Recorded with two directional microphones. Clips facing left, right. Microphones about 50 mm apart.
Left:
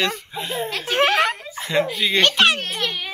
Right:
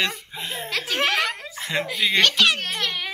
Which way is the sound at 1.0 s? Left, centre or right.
Left.